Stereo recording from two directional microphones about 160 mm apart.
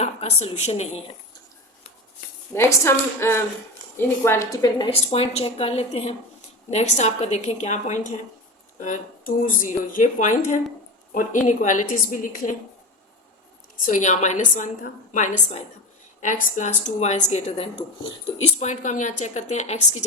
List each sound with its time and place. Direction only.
0.0 s speech: 40° left (ahead or behind)
2.6 s a woman's voice: 15° left (ahead or behind)
4.9 s a woman's voice: 35° left (ahead or behind); by 12.5 s 55° left (ahead or behind)
13.8 s speech: 50° left (ahead or behind)